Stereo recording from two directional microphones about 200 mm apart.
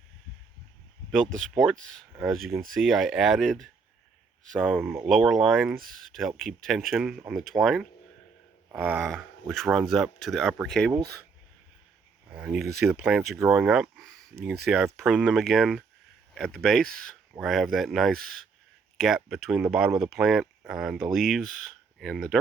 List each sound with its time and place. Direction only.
1.1 s speech: 5° left (ahead or behind)
4.8 s speech: 10° right (ahead or behind)
5.0 s speech: centre (ahead or behind)
12.3 s speech: 5° right (ahead or behind)
12.6 s speech: 50° right (ahead or behind)
12.9 s speech: 5° right (ahead or behind)